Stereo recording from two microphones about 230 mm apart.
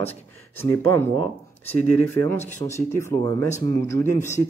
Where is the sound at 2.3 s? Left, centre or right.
Left.